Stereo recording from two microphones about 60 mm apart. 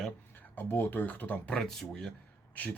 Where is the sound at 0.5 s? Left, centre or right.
Left.